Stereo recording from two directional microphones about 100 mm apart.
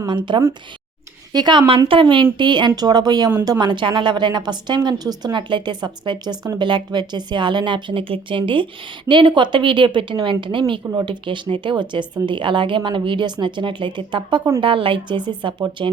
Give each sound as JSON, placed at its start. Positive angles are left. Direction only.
{"t": 0.0, "sound": "a woman's voice", "side_deg": -50}